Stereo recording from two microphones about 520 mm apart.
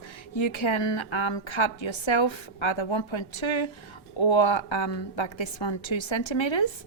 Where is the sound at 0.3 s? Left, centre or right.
Left.